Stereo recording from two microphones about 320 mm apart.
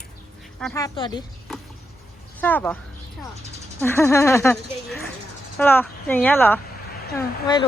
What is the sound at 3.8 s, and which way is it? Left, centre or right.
Speech, centre.